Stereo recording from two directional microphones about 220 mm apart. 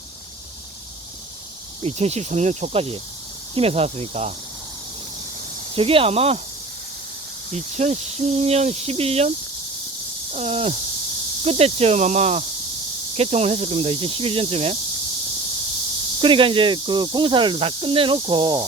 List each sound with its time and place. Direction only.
1.8 s speech: 30° right (ahead or behind)
5.7 s speech: 25° right (ahead or behind)
7.5 s speech: 30° right (ahead or behind)
10.3 s speech: 30° right (ahead or behind)
16.2 s speech: 25° right (ahead or behind)